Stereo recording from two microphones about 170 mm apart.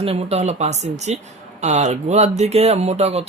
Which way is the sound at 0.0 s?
35° right (ahead or behind).